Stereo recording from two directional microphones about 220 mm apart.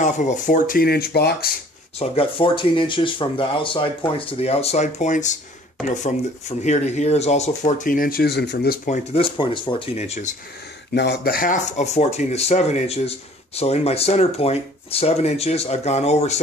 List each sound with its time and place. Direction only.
0.0 s speech: 35° left (ahead or behind)
2.0 s speech: 25° left (ahead or behind)
6.6 s speech: 30° left (ahead or behind)
10.9 s speech: 50° left (ahead or behind); by 16.3 s 30° left (ahead or behind)